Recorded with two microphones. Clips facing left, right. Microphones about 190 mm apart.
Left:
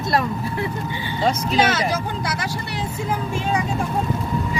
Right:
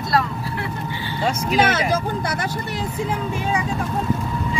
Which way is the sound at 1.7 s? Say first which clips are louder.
Right 1 dB; 55° right (ahead or behind).